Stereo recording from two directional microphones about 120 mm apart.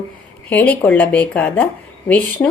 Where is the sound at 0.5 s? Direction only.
15° left (ahead or behind).